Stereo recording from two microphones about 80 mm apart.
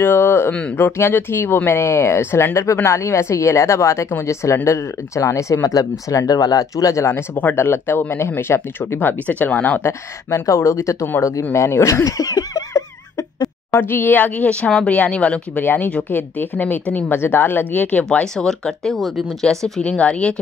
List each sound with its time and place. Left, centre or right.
0.0 s speech: left
7.3 s speech: left
9.8 s speech: left
13.7 s speech: left
18.3 s speech: centre
19.8 s speech: centre